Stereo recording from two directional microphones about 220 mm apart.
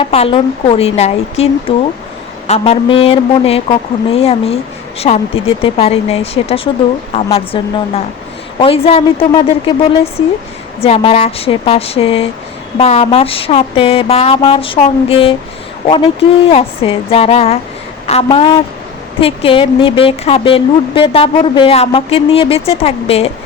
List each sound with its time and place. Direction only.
0.0 s speech: 25° left (ahead or behind)
10.8 s speech: 25° left (ahead or behind)
16.5 s a woman's voice: 25° left (ahead or behind)